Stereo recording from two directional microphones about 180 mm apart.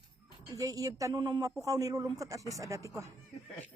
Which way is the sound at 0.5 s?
20° right (ahead or behind).